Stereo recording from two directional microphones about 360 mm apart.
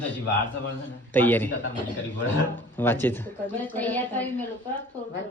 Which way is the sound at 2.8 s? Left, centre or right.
Centre.